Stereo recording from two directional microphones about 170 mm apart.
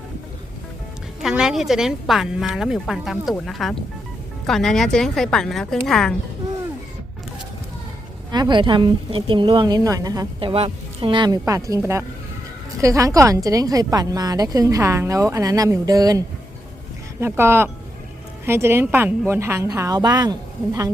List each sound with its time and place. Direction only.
1.2 s a woman's voice: 5° right (ahead or behind)
8.3 s a woman's voice: 25° right (ahead or behind)
10.5 s a woman's voice: 30° right (ahead or behind)